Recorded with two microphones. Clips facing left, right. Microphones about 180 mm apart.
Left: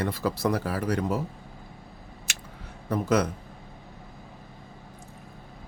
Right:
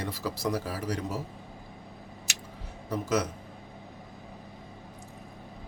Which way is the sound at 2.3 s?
60° left (ahead or behind).